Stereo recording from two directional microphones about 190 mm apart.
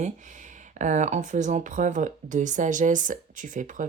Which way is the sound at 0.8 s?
40° right (ahead or behind).